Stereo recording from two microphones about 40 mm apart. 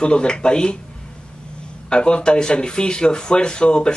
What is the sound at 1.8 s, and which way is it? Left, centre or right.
A man's voice, left.